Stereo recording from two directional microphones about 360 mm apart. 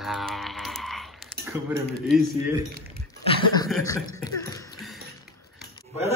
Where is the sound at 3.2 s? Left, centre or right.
Centre.